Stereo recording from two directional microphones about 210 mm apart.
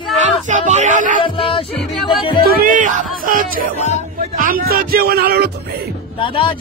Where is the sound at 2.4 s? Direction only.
45° right (ahead or behind).